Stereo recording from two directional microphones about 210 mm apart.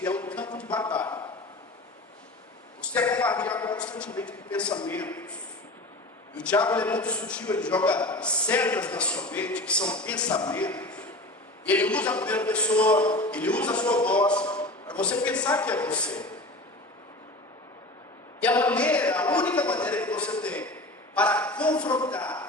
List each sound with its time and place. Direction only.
0.0 s speech: 10° left (ahead or behind)
2.8 s a sound: 10° left (ahead or behind)
3.2 s a man's voice: 5° left (ahead or behind)
6.3 s a man's voice: 5° left (ahead or behind)
13.1 s a man's voice: 20° left (ahead or behind)
13.3 s a man's voice: 5° left (ahead or behind)
18.3 s a man's voice: 5° left (ahead or behind)